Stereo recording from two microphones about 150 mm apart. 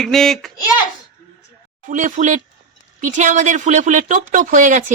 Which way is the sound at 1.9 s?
60° right (ahead or behind).